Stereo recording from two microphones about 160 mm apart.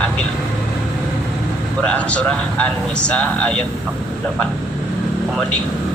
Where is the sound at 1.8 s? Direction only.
10° left (ahead or behind).